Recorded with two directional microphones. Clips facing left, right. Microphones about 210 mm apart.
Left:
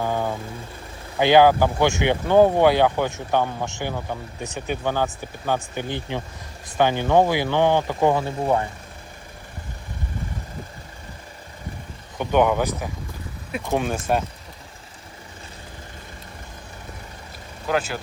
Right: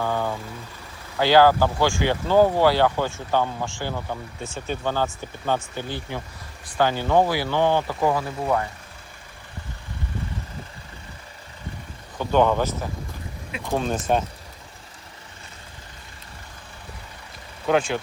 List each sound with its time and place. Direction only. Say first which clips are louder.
0.0 s speech: left 1 dB; 15° left (ahead or behind)
12.2 s speech: even; 15° left (ahead or behind)
17.7 s speech: right 3 dB; 5° left (ahead or behind)